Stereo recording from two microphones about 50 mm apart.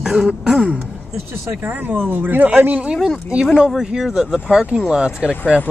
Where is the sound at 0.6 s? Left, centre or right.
Right.